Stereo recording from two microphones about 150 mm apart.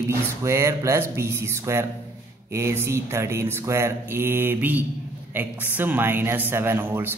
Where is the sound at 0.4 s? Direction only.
20° right (ahead or behind).